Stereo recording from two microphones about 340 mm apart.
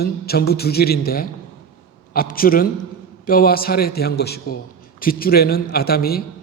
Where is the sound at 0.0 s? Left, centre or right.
Left.